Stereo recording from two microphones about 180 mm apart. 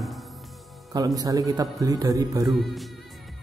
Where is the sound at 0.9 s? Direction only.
20° right (ahead or behind).